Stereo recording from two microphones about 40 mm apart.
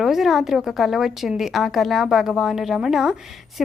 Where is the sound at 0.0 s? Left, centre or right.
Centre.